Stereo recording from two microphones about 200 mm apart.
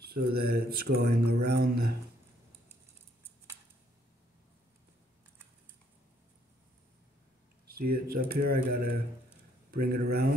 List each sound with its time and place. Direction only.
0.1 s speech: 55° right (ahead or behind)
7.6 s speech: 50° right (ahead or behind)